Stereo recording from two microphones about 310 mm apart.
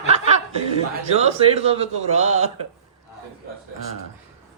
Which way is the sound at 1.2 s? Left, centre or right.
Centre.